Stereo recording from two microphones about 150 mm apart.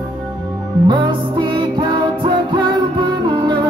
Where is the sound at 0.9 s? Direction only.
35° right (ahead or behind).